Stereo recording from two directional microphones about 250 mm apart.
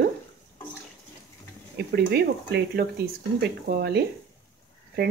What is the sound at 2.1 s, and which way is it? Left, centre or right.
Speech, right.